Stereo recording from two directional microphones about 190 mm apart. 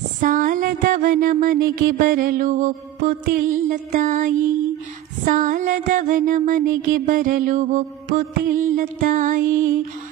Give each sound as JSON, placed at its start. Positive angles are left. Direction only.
{"t": 0.2, "sound": "mantra", "side_deg": -45}